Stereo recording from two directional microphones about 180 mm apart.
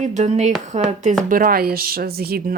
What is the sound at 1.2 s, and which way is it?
Speech, 50° right (ahead or behind).